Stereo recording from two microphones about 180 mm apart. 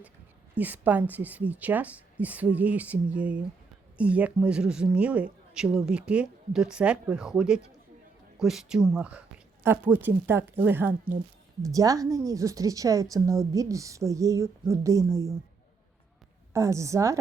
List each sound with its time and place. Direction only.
0.6 s speech: 10° right (ahead or behind)
16.5 s speech: 15° right (ahead or behind)